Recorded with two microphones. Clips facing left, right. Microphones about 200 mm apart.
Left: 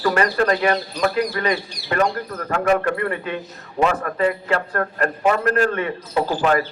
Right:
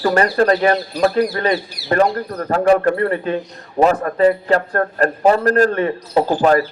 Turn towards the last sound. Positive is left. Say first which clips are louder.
# right 5 dB
turn(degrees=-40)  # may be behind; listen again after turning